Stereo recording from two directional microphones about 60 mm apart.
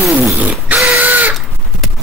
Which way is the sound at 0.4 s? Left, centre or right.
Right.